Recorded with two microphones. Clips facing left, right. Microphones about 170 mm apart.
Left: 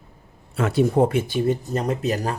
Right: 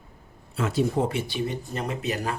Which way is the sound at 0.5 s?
60° left (ahead or behind).